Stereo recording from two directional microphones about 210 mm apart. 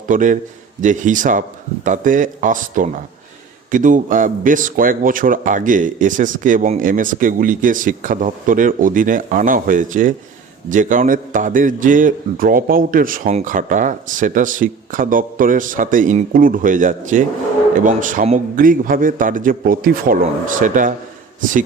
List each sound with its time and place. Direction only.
0.1 s a man's voice: 40° right (ahead or behind)